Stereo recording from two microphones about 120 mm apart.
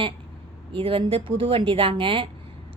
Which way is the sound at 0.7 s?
45° right (ahead or behind).